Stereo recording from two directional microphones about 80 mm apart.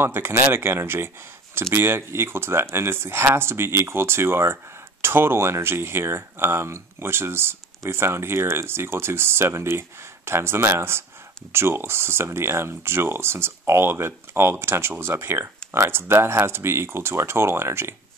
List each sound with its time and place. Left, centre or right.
0.0 s speech: right